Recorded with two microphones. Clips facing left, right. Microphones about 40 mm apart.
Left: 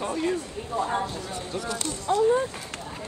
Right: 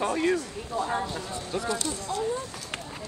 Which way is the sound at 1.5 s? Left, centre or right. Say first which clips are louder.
Right 3 dB; right.